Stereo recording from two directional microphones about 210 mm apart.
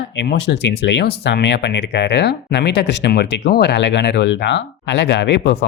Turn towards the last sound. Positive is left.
turn(degrees=55)  # may be behind; listen again after turning